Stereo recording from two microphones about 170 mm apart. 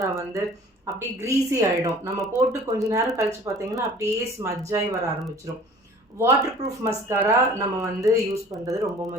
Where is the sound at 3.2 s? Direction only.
20° right (ahead or behind).